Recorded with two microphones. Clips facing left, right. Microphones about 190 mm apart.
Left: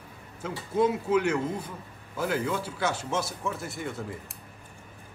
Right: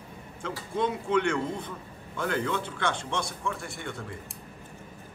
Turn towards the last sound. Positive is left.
turn(degrees=0)  # may be behind; listen again after turning